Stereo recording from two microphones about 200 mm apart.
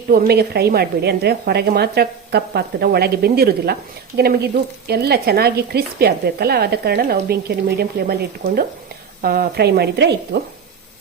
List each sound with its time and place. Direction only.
0.1 s speech: 50° right (ahead or behind)
4.9 s a woman's voice: 55° right (ahead or behind)